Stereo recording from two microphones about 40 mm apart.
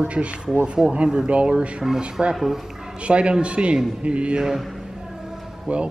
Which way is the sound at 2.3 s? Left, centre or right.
Centre.